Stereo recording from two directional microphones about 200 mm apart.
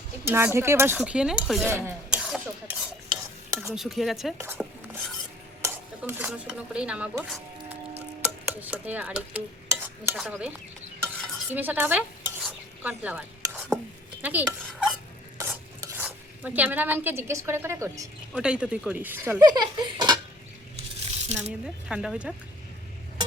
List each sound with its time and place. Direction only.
0.3 s speech: 10° right (ahead or behind)
3.1 s stir: 15° right (ahead or behind)
3.8 s speech: centre (ahead or behind)
5.6 s speech: 10° right (ahead or behind)
8.2 s stir: 5° right (ahead or behind)
10.2 s speech: 5° right (ahead or behind)
11.5 s stir: 10° right (ahead or behind)
18.3 s speech: 5° right (ahead or behind); by 20.1 s 20° right (ahead or behind)
20.7 s coin: 35° right (ahead or behind)
21.8 s speech: 5° right (ahead or behind)